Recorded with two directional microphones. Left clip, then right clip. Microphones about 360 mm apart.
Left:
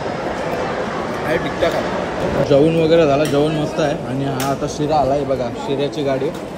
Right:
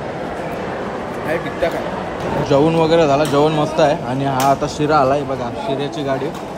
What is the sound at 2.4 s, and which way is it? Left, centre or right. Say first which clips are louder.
Speech: even; centre.